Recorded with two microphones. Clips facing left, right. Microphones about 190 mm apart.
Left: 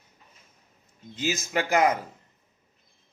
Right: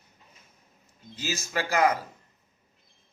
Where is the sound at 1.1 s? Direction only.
20° left (ahead or behind).